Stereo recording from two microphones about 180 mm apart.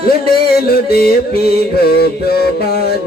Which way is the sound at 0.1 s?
60° left (ahead or behind).